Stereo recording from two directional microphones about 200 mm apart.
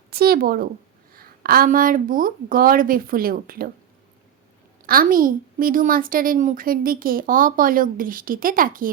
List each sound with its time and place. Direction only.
0.1 s a woman's voice: 50° right (ahead or behind)
4.9 s a woman's voice: 45° right (ahead or behind)